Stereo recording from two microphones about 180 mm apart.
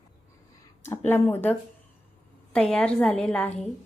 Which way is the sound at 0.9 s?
10° left (ahead or behind).